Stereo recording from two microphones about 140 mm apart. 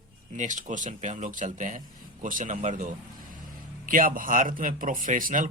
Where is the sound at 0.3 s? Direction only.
65° right (ahead or behind).